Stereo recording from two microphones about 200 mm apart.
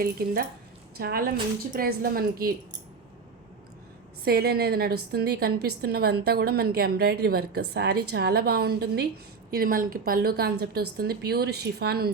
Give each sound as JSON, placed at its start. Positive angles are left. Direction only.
{"t": 0.9, "sound": "a woman's voice", "side_deg": -50}
{"t": 4.2, "sound": "a woman's voice", "side_deg": -50}